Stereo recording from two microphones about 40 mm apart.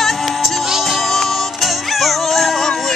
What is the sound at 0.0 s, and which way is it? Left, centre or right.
Music, centre.